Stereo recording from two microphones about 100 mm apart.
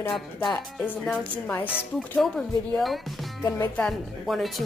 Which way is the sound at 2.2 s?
Centre (ahead or behind).